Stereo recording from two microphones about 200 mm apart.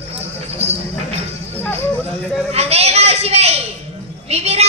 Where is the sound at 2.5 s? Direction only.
30° right (ahead or behind).